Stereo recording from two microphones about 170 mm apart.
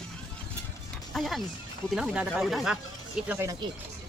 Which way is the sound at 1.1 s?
Centre (ahead or behind).